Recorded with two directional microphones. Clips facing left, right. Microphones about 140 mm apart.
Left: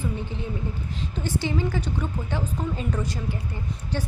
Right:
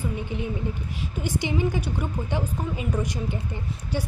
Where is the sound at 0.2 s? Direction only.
15° right (ahead or behind).